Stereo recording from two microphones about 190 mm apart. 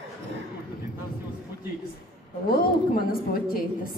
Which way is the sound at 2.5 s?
50° left (ahead or behind).